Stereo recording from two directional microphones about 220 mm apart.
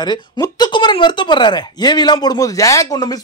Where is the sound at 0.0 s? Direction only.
20° left (ahead or behind).